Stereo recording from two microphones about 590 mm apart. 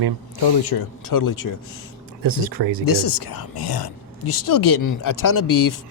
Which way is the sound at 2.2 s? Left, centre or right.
Right.